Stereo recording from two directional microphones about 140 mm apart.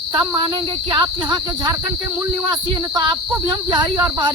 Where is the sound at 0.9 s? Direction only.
30° right (ahead or behind).